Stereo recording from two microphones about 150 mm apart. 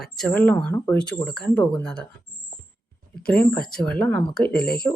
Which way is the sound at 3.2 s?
10° left (ahead or behind).